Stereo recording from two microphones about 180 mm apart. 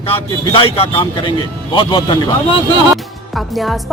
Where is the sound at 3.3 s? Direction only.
Centre (ahead or behind).